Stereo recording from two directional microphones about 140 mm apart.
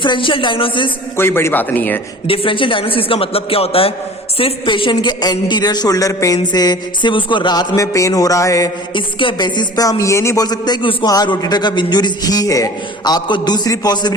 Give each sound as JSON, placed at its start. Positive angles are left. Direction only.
{"t": 0.0, "sound": "a man's voice", "side_deg": 35}
{"t": 1.1, "sound": "a man's voice", "side_deg": 15}
{"t": 2.2, "sound": "a man's voice", "side_deg": 40}
{"t": 8.9, "sound": "a man's voice", "side_deg": 35}